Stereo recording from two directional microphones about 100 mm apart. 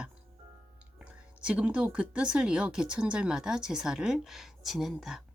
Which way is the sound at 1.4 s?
10° right (ahead or behind).